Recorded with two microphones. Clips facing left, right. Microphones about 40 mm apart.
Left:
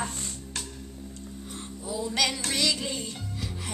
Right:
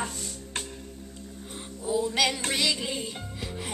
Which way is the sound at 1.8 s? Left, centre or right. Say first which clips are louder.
Right 3 dB; right.